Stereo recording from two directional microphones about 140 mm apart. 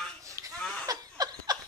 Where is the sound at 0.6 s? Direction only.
10° left (ahead or behind).